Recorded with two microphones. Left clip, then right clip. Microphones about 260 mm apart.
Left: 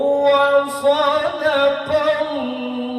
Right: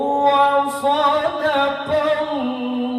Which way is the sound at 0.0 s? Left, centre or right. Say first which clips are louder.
Left 1 dB; right.